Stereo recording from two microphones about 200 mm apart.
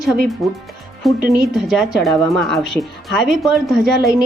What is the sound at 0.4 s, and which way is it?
Speech, centre (ahead or behind).